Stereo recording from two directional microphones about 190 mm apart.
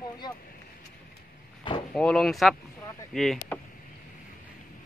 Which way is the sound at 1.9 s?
5° left (ahead or behind).